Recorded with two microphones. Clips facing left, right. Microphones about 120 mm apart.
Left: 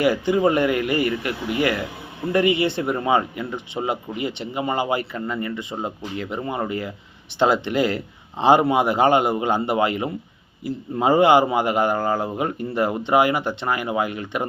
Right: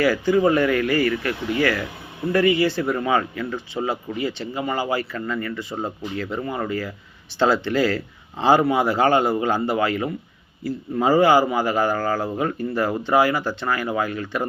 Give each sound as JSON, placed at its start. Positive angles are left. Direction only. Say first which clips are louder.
{"t": 0.0, "sound": "speech", "louder": "even", "side_deg": 20}